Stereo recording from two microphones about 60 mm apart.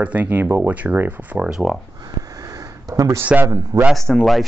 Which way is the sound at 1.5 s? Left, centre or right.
Centre.